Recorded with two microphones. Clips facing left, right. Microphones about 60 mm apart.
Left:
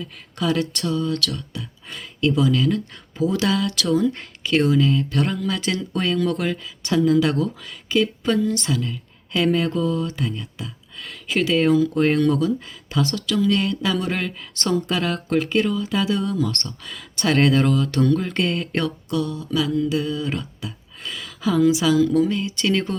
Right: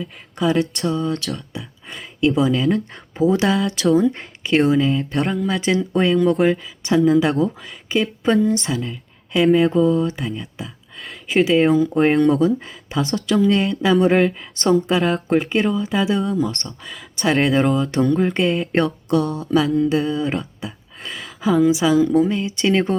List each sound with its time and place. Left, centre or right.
0.0 s speech: centre
2.6 s speech: right
10.2 s speech: centre
10.6 s speech: centre; by 14.3 s right
14.3 s speech: centre
16.9 s speech: centre
17.5 s speech: centre
18.3 s speech: centre
18.7 s speech: right
19.5 s speech: right
20.6 s speech: right
21.0 s a sound: right
21.5 s speech: centre